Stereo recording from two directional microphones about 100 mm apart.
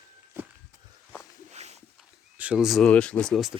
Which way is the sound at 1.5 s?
90° right.